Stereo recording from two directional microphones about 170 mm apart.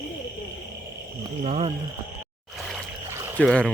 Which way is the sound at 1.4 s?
40° right (ahead or behind).